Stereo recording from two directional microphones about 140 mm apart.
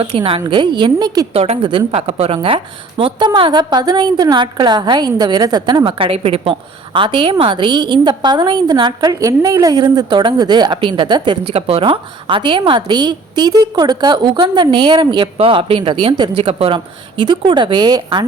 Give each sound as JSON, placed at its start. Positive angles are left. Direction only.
{"t": 0.0, "sound": "a woman's voice", "side_deg": -40}
{"t": 1.3, "sound": "a woman's voice", "side_deg": -50}